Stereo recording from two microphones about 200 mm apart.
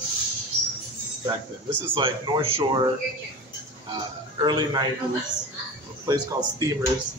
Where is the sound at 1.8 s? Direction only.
25° right (ahead or behind).